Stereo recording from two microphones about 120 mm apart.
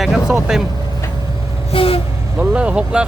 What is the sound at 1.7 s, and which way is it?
Vehicle, 50° left (ahead or behind).